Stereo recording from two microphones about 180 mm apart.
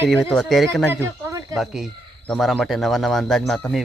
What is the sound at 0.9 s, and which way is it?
Speech, 15° right (ahead or behind).